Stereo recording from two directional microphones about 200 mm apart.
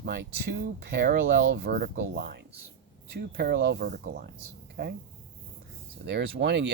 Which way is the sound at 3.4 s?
55° right (ahead or behind).